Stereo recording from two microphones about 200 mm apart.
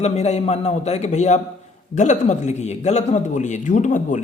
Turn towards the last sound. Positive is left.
turn(degrees=40)  # may be behind; listen again after turning